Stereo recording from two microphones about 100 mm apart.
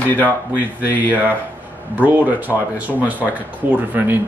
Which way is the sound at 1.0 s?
15° right (ahead or behind).